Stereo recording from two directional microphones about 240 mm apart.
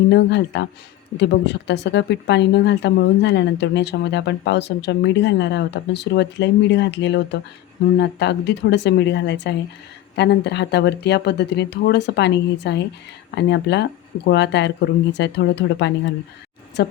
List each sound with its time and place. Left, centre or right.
0.1 s a woman's voice: left